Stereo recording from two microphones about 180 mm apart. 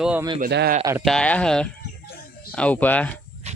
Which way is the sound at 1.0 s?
5° left (ahead or behind).